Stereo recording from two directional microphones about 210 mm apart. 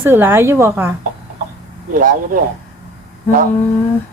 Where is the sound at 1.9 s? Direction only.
40° right (ahead or behind).